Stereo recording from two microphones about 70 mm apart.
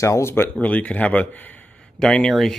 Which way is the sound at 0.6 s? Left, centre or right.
Left.